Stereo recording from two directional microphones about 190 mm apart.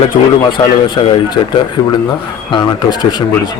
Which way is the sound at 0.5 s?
25° left (ahead or behind).